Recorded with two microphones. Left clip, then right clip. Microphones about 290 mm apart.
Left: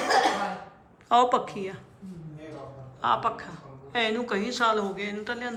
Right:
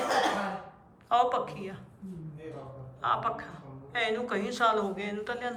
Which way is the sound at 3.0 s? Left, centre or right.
Centre.